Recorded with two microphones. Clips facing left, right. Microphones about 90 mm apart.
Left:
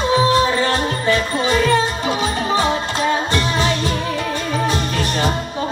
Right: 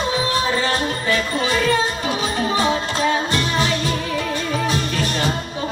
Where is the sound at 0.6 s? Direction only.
30° left (ahead or behind).